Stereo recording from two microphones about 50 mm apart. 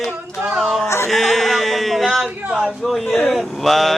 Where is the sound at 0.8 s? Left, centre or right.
Left.